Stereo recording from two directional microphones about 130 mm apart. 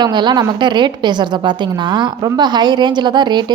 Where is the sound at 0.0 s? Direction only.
35° right (ahead or behind).